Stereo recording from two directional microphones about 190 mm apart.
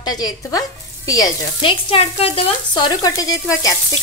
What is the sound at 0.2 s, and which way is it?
Sizzle, 20° left (ahead or behind).